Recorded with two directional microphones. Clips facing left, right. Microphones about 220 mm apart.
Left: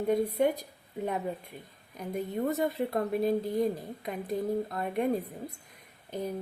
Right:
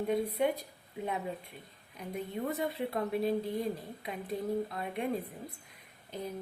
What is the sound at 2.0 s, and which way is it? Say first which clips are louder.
Speech: left 5 dB; 45° left (ahead or behind).